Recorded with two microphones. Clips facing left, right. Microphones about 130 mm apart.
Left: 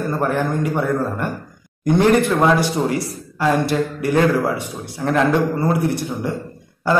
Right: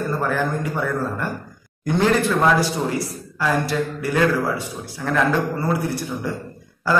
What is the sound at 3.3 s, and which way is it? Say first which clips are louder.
A man's voice: left 4 dB; 20° left (ahead or behind).